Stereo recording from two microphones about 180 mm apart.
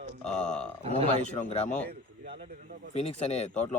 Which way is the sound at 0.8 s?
30° right (ahead or behind).